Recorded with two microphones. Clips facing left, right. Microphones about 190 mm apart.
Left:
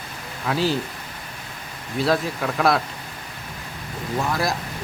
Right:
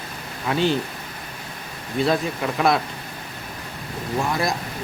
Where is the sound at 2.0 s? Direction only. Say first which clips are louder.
Even; centre (ahead or behind).